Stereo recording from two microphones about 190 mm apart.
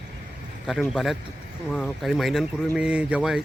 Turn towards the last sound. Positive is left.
turn(degrees=-5)  # may be behind; listen again after turning